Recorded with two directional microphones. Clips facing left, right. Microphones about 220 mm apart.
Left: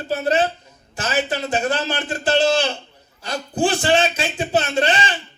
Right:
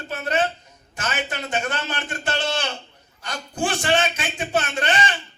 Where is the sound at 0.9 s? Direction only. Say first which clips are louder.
Left 6 dB; 30° left (ahead or behind).